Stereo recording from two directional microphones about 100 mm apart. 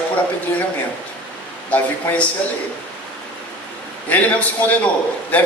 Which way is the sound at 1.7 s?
15° left (ahead or behind).